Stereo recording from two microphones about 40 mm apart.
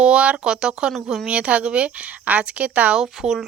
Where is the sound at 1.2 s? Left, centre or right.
Right.